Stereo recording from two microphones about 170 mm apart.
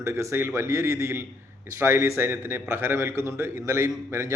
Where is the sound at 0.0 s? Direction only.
15° right (ahead or behind).